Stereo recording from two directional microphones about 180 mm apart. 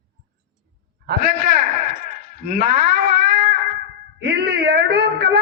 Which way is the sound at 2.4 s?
55° right (ahead or behind).